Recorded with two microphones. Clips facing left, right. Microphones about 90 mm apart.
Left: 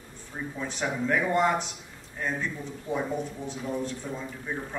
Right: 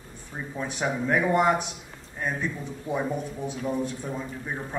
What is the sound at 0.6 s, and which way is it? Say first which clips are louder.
Speech: right 3 dB; 15° right (ahead or behind).